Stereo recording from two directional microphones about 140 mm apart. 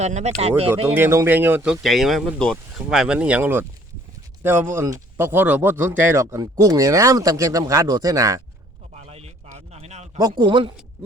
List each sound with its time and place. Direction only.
0.0 s speech: 55° right (ahead or behind)
0.9 s speech: 20° right (ahead or behind)
9.0 s a sound: 50° right (ahead or behind)
10.2 s speech: 30° right (ahead or behind)